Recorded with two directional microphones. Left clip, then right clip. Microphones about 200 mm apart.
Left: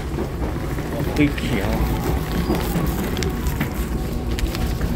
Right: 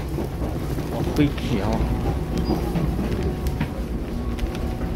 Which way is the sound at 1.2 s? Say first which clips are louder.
Left 3 dB; 15° right (ahead or behind).